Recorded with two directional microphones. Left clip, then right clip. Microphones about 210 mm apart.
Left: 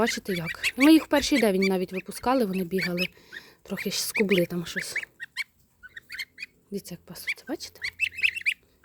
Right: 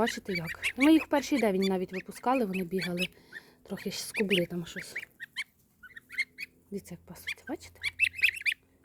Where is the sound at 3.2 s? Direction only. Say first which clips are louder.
Left 4 dB; 15° left (ahead or behind).